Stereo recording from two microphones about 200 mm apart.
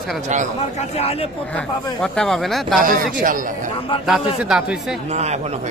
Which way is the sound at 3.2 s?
45° right (ahead or behind).